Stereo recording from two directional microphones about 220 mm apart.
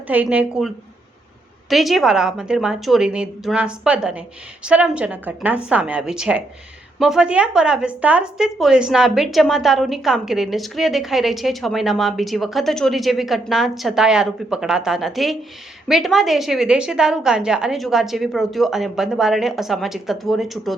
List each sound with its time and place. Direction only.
0.1 s a woman's voice: 5° right (ahead or behind)
1.7 s speech: centre (ahead or behind)